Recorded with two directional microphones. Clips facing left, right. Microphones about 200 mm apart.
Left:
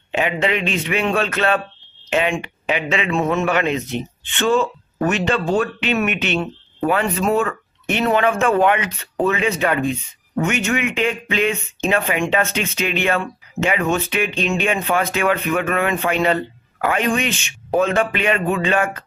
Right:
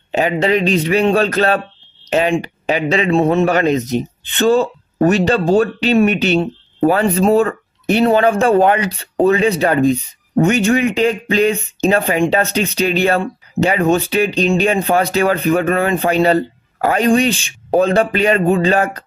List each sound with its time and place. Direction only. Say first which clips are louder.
0.1 s speech: right 5 dB; 35° right (ahead or behind)